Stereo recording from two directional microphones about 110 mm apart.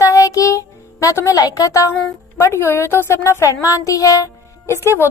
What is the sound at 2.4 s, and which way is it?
A woman's voice, 20° left (ahead or behind).